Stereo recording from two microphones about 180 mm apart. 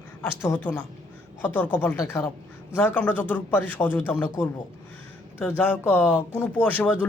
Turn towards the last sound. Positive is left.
turn(degrees=10)  # may be behind; listen again after turning